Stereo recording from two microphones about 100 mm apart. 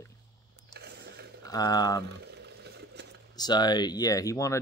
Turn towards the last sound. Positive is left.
turn(degrees=35)  # may be behind; listen again after turning